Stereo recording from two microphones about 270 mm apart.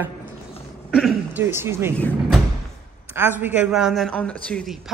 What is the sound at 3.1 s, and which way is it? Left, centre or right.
A woman's voice, centre.